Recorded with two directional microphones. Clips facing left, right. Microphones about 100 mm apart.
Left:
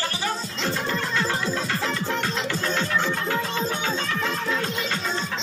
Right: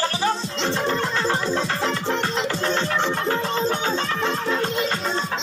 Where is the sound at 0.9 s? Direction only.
35° right (ahead or behind).